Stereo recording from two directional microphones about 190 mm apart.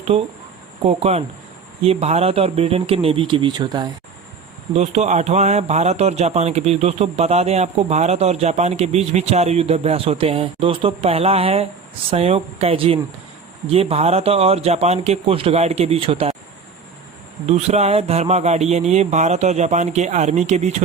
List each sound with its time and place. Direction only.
0.1 s a man's voice: 30° right (ahead or behind)
4.7 s a man's voice: 35° right (ahead or behind)
17.4 s a man's voice: 35° right (ahead or behind)